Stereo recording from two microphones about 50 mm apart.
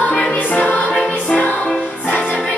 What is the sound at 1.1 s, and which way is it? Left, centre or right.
Music, left.